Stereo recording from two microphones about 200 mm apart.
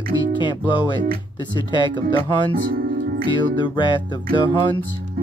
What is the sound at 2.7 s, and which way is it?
Music, 45° right (ahead or behind).